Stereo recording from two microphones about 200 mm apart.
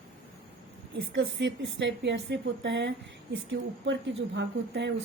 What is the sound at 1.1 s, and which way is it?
A woman's voice, 70° right (ahead or behind).